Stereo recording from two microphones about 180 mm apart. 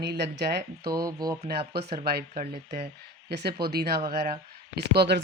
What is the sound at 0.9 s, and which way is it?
Speech, 20° right (ahead or behind).